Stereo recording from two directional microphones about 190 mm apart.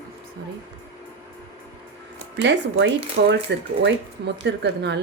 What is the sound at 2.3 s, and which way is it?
Speech, 65° right (ahead or behind).